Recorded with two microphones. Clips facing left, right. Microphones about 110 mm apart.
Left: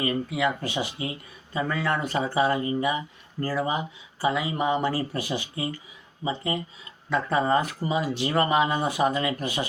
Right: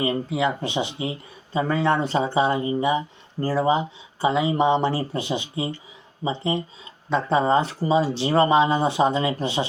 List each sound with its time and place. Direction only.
0.0 s speech: 25° right (ahead or behind)